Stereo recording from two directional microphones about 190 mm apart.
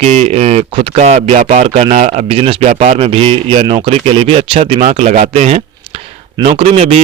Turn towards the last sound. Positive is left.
turn(degrees=-35)  # may be behind; listen again after turning